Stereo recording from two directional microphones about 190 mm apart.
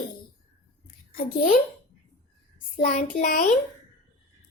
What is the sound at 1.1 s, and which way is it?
Speech, 50° left (ahead or behind).